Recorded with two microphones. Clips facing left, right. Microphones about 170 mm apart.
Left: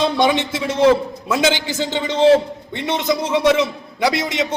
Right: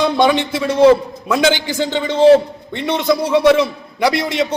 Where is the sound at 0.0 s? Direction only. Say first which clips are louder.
Right 3 dB; 20° left (ahead or behind).